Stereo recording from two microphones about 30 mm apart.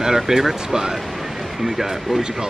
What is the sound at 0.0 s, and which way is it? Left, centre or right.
Speech, centre.